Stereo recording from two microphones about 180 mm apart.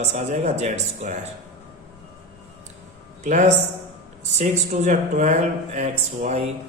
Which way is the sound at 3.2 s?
40° right (ahead or behind).